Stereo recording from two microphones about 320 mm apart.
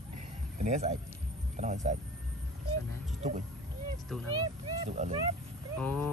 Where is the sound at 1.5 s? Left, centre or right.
Right.